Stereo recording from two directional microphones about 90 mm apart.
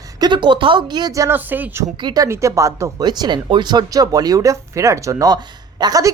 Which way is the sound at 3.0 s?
55° right (ahead or behind).